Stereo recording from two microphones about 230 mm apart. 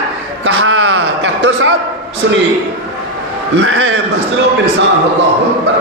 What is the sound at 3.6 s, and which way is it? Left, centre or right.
Speech, right.